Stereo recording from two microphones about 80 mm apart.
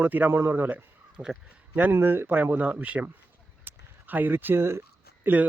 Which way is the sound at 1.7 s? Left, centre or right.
Right.